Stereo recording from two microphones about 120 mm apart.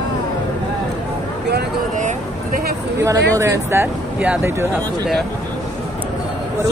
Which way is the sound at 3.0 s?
25° right (ahead or behind).